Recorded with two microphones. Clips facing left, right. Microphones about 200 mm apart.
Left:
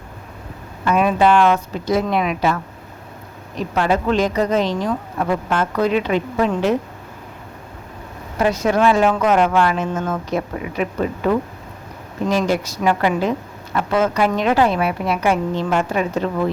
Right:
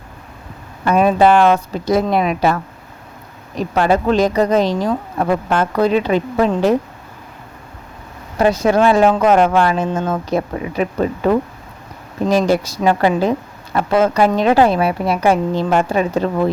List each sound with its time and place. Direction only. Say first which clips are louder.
0.9 s speech: right 3 dB; 35° right (ahead or behind)
3.6 s speech: right 3 dB; 40° right (ahead or behind)
8.4 s speech: right 3 dB; 35° right (ahead or behind)